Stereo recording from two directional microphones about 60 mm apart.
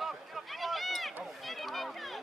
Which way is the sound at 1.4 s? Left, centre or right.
Centre.